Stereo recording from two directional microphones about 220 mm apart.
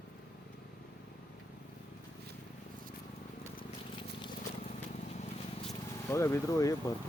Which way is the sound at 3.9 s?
20° left (ahead or behind).